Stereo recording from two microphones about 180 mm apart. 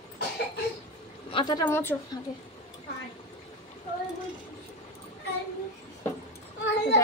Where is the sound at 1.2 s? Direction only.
25° left (ahead or behind).